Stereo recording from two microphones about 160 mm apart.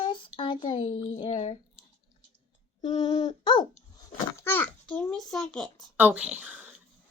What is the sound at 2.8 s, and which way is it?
Speech, 30° left (ahead or behind).